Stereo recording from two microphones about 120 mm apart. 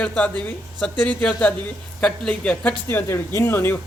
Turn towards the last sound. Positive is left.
turn(degrees=20)  # may be behind; listen again after turning